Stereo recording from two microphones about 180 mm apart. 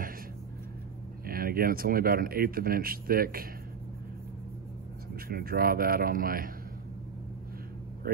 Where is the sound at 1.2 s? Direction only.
55° right (ahead or behind).